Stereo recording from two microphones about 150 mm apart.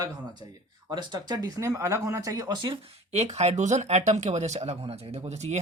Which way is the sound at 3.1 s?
45° right (ahead or behind).